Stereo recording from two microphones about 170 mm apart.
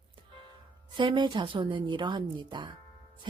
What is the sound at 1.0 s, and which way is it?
Speech, 30° right (ahead or behind).